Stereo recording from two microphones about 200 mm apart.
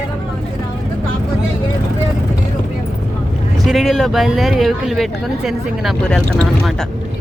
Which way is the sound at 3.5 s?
Centre (ahead or behind).